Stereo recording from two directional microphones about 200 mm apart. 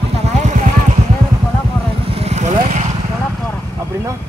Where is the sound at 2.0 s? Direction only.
30° right (ahead or behind).